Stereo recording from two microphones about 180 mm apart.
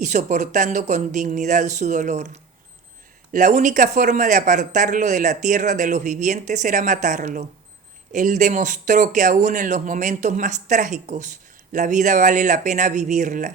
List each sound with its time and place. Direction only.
0.0 s a man's voice: 40° right (ahead or behind)